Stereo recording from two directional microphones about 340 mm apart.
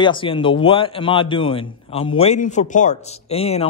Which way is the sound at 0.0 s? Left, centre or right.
Centre.